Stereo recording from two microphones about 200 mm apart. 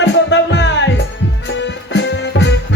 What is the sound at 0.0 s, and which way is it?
Music, 65° left (ahead or behind).